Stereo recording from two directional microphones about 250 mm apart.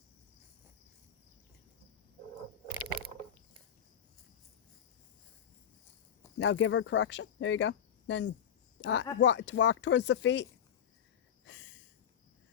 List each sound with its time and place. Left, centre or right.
2.6 s mechanisms: right
6.4 s speech: left
11.4 s a sound: left